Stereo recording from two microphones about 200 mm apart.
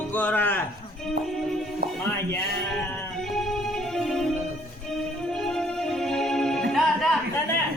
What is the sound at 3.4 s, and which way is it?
Music, centre (ahead or behind).